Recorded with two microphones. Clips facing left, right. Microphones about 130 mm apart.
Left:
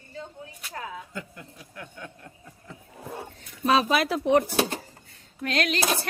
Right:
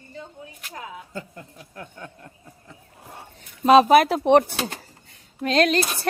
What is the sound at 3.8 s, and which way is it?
Speech, 55° right (ahead or behind).